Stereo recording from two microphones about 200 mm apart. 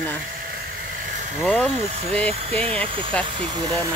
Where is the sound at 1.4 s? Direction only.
5° left (ahead or behind).